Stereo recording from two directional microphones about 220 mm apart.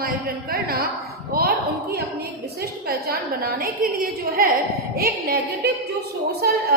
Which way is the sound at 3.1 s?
45° right (ahead or behind).